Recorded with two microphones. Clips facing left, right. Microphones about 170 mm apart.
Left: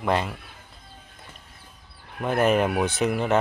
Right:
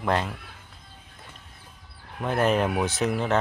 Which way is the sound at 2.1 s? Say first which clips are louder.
Left 2 dB; 5° left (ahead or behind).